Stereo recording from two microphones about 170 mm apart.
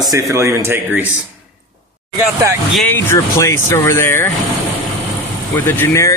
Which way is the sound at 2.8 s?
10° left (ahead or behind).